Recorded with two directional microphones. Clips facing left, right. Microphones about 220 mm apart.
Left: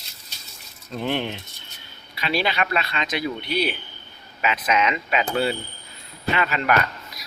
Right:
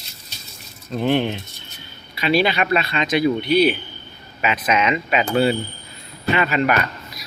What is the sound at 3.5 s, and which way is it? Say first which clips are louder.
Speech: right 8 dB; 55° right (ahead or behind).